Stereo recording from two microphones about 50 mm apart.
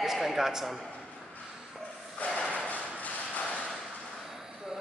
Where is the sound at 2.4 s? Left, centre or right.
Centre.